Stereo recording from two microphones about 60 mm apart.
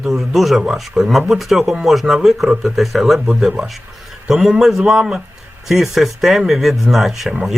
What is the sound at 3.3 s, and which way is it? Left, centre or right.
Speech, centre.